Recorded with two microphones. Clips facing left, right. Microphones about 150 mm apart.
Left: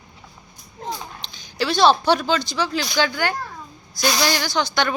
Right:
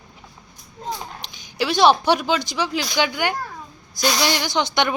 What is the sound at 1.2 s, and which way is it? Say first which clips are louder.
Speech: even; 15° right (ahead or behind).